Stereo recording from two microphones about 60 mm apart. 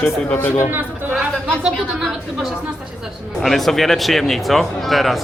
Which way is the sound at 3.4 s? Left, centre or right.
Centre.